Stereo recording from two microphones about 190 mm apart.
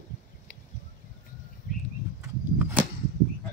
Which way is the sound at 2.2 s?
10° right (ahead or behind).